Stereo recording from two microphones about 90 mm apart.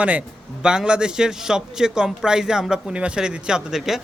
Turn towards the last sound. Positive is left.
turn(degrees=-5)  # may be behind; listen again after turning